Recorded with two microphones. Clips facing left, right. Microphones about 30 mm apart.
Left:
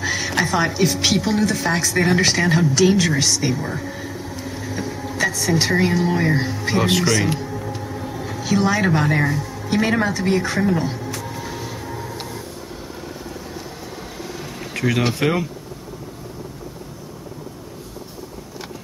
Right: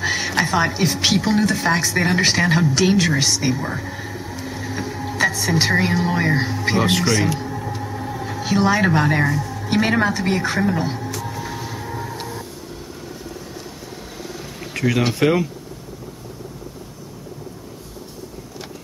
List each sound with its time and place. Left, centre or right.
0.0 s music: centre
0.7 s speech: centre
7.3 s music: centre
8.4 s speech: centre
9.2 s music: centre
9.7 s speech: centre
11.2 s music: centre
12.2 s vehicle: centre
14.7 s speech: centre